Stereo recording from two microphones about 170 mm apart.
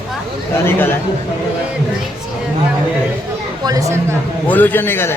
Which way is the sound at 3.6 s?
20° right (ahead or behind).